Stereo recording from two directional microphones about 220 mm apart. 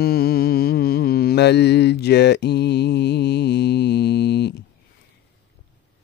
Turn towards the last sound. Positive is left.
turn(degrees=50)  # may be behind; listen again after turning